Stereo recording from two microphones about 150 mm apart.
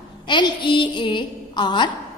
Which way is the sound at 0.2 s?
30° left (ahead or behind).